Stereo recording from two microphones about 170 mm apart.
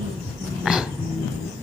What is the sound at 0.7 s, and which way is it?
Dog, 5° right (ahead or behind).